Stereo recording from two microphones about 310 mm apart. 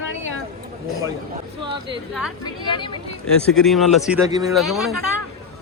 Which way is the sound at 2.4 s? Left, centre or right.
Centre.